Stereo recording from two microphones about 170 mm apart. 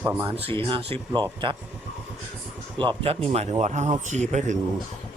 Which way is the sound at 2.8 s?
30° right (ahead or behind).